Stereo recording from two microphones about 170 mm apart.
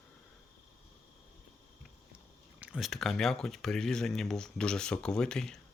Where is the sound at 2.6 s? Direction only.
5° right (ahead or behind).